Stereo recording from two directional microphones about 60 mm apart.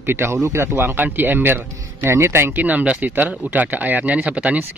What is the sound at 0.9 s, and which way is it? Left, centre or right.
Speech, right.